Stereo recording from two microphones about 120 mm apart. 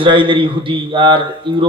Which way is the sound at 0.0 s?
45° right (ahead or behind).